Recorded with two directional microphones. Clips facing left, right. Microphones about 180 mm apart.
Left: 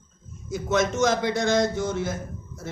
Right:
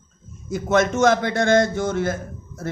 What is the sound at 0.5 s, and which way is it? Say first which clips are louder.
A man's voice: right 4 dB; 55° right (ahead or behind).